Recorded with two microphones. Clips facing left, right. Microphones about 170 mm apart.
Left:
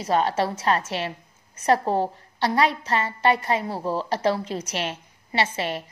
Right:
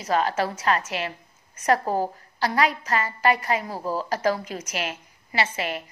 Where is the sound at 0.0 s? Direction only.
30° left (ahead or behind).